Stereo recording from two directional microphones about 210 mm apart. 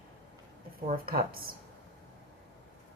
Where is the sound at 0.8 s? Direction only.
45° right (ahead or behind).